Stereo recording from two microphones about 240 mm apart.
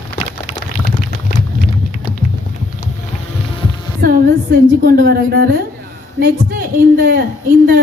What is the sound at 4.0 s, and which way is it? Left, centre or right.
A woman's voice, right.